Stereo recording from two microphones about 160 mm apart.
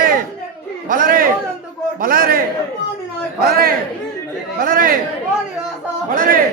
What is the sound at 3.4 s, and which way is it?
A man's voice, 70° right (ahead or behind).